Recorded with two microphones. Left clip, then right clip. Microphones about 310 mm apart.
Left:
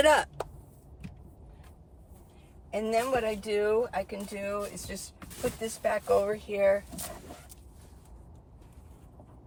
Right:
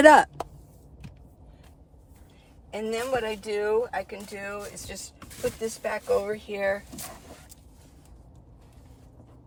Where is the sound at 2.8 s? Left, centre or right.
Centre.